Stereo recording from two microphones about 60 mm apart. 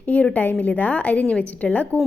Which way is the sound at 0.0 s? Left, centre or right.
Left.